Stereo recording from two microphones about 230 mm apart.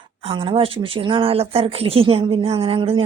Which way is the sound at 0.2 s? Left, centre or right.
Right.